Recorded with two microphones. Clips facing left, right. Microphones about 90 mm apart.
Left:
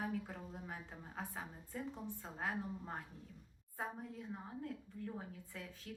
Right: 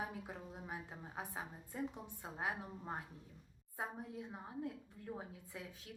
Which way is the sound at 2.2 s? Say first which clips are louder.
Right 1 dB; 15° right (ahead or behind).